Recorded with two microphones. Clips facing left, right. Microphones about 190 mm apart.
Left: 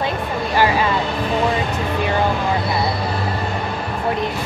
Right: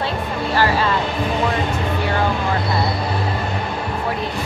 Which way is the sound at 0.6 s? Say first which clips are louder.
Left 2 dB; 15° left (ahead or behind).